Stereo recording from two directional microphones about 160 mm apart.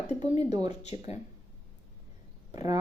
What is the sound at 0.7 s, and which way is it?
Speech, 45° left (ahead or behind).